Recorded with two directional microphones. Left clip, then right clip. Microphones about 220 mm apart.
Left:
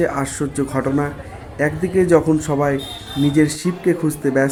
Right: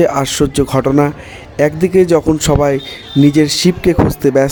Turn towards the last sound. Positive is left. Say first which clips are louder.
# right 7 dB
turn(degrees=-40)  # may be behind; listen again after turning